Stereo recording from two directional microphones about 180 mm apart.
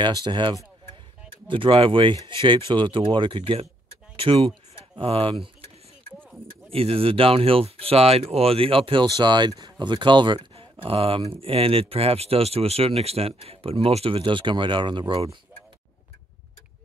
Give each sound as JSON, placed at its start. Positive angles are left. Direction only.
{"t": 0.0, "sound": "speech", "side_deg": -25}
{"t": 6.7, "sound": "speech", "side_deg": -30}